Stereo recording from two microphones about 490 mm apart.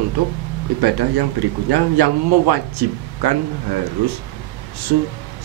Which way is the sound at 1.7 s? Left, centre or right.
Right.